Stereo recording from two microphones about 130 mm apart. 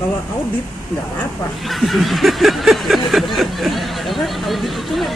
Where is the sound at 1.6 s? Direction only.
Centre (ahead or behind).